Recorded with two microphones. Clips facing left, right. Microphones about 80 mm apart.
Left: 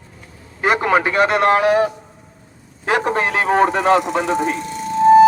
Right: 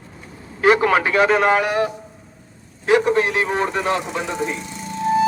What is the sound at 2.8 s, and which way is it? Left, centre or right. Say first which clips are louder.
Speech: right 2 dB; left.